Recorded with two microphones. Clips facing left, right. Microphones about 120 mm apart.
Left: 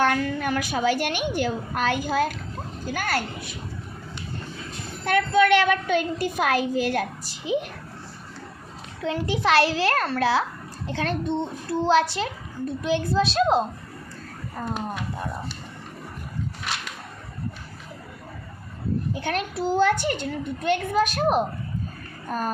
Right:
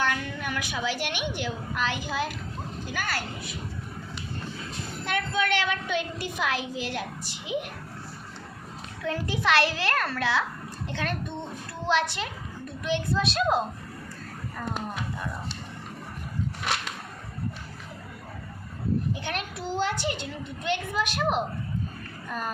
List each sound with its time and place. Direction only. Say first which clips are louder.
0.0 s a child's voice: left 7 dB; 45° left (ahead or behind)
5.0 s a woman's voice: left 9 dB; 50° left (ahead or behind)
7.4 s a child's voice: left 6 dB; 35° left (ahead or behind)
9.0 s a child's voice: left 4 dB; 30° left (ahead or behind)
19.1 s a child's voice: left 6 dB; 40° left (ahead or behind)